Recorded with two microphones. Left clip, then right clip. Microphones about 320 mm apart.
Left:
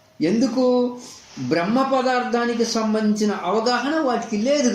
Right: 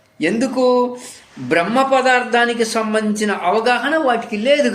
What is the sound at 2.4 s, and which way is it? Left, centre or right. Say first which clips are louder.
Speech: right 5 dB; right.